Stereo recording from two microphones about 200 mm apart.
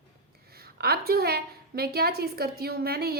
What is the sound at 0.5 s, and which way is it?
A woman's voice, 50° right (ahead or behind).